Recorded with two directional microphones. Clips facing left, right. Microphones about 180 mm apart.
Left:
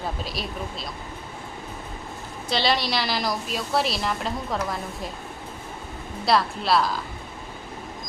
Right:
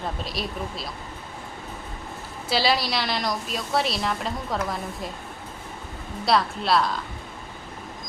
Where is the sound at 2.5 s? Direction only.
5° right (ahead or behind).